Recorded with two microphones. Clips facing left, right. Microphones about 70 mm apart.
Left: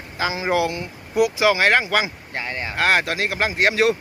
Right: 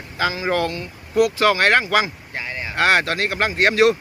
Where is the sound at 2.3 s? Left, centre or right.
Left.